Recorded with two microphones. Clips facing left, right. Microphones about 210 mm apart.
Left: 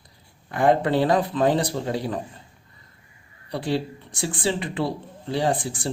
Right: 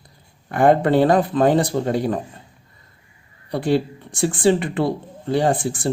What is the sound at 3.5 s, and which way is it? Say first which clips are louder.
A man's voice: right 6 dB; 50° right (ahead or behind).